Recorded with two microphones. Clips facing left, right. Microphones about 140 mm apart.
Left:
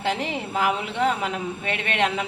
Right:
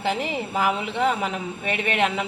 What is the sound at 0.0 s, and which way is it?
Frying, 5° right (ahead or behind).